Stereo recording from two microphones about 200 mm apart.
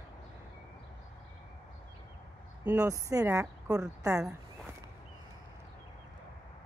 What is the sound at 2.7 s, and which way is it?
Speech, 15° right (ahead or behind).